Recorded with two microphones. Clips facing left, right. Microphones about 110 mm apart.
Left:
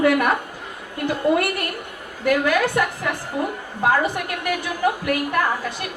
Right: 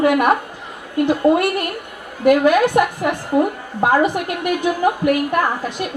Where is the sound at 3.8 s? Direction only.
25° right (ahead or behind).